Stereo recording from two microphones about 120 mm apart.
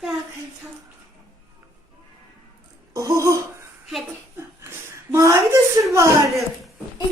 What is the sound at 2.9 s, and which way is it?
Speech, 30° right (ahead or behind).